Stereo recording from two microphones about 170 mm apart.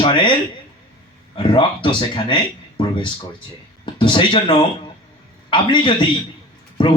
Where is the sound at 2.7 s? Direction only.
30° left (ahead or behind).